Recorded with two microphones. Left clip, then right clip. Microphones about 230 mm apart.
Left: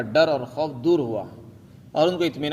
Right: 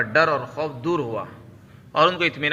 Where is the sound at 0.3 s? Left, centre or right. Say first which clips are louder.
Even; left.